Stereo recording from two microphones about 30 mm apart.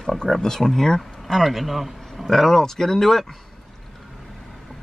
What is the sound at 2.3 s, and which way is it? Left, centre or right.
Speech, centre.